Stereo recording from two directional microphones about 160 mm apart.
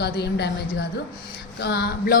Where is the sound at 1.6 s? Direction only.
75° left (ahead or behind).